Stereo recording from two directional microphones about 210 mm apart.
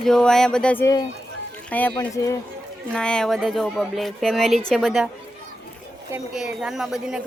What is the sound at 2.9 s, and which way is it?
Speech, 5° left (ahead or behind).